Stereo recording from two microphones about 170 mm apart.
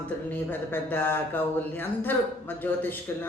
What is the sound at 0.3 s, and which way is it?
A woman's voice, 10° left (ahead or behind).